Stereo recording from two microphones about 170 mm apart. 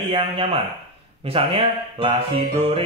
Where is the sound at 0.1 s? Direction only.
35° right (ahead or behind).